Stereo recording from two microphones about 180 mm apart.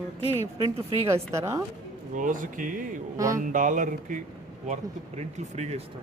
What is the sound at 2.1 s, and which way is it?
Speech, 45° right (ahead or behind).